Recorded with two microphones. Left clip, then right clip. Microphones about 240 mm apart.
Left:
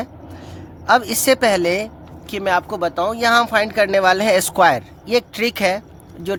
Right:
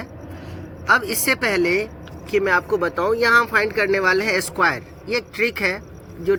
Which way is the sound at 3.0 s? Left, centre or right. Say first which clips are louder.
Left 1 dB; left.